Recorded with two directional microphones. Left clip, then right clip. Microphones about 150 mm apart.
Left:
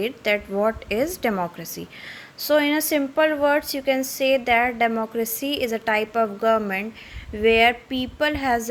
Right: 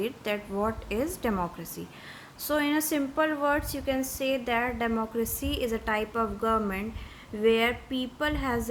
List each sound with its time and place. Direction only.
0.0 s a woman's voice: 30° left (ahead or behind)